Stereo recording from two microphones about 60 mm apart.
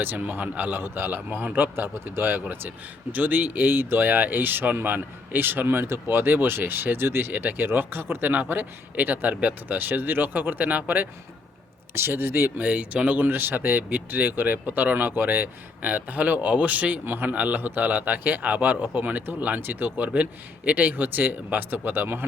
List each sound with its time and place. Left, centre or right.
0.0 s speech: right
11.9 s speech: right
12.6 s speech: right